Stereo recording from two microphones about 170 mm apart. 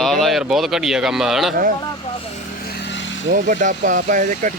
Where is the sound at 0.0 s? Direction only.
Centre (ahead or behind).